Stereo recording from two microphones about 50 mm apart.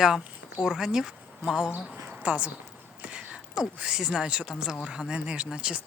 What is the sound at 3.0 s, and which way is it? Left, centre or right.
Whispering, centre.